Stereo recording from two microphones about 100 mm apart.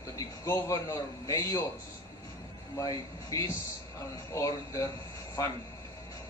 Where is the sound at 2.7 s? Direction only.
35° left (ahead or behind).